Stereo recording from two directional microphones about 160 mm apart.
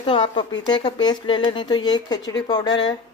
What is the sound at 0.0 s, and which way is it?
Speech, 30° left (ahead or behind).